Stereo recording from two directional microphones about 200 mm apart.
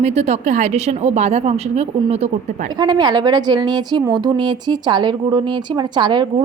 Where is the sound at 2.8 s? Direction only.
20° right (ahead or behind).